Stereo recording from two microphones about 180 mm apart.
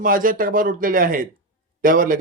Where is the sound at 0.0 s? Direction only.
50° right (ahead or behind).